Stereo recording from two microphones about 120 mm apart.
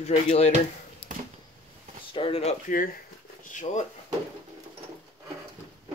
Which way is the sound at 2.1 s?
50° left (ahead or behind).